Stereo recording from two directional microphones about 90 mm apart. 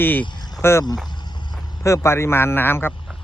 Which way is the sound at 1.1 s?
55° left (ahead or behind).